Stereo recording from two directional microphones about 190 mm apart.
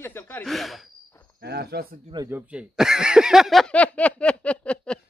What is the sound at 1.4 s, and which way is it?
Speech, 55° right (ahead or behind).